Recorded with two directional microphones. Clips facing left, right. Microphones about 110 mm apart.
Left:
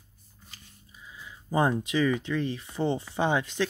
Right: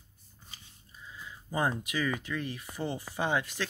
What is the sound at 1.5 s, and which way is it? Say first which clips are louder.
Speech: left 6 dB; 25° left (ahead or behind).